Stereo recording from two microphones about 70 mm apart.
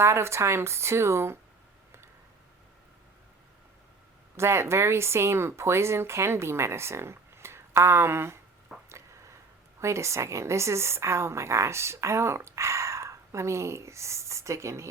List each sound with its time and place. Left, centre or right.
0.0 s speech: right
4.4 s speech: right
8.9 s a sound: right
9.8 s a woman's voice: right